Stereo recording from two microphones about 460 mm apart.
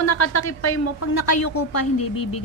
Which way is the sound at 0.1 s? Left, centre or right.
Left.